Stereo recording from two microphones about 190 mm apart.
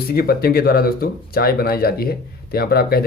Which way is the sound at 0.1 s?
55° left (ahead or behind).